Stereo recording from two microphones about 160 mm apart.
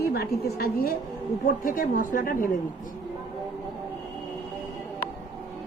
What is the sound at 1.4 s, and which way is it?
A woman's voice, 60° left (ahead or behind).